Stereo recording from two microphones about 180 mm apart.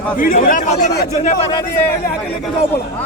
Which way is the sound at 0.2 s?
50° left (ahead or behind).